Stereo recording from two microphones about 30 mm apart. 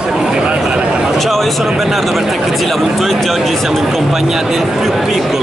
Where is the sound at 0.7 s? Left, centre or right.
Right.